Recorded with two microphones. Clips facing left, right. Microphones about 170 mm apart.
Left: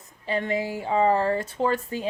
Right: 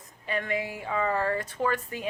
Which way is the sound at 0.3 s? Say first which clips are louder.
Left 4 dB; 30° left (ahead or behind).